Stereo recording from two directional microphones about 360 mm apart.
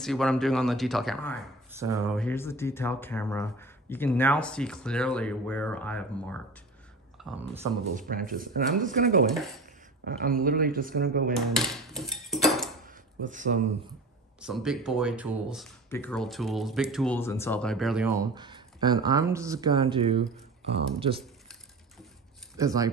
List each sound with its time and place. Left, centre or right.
0.0 s speech: centre
7.2 s speech: centre
8.1 s speech: right
11.3 s speech: centre
12.8 s a sound: right
14.4 s speech: centre
21.2 s a sound: centre
22.6 s speech: centre